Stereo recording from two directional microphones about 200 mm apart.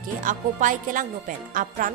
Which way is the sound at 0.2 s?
40° right (ahead or behind).